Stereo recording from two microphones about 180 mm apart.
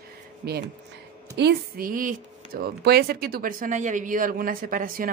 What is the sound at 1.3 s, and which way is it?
Speech, 65° right (ahead or behind).